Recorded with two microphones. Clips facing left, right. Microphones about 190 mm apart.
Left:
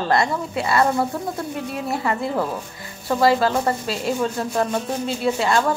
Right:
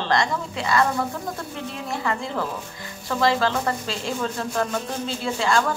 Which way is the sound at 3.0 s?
30° left (ahead or behind).